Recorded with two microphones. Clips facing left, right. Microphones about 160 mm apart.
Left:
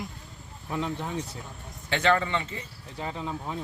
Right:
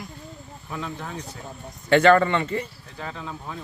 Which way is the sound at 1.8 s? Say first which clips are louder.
Right 8 dB; 60° right (ahead or behind).